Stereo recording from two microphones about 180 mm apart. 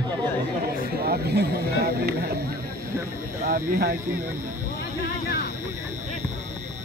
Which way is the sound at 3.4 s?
60° right (ahead or behind).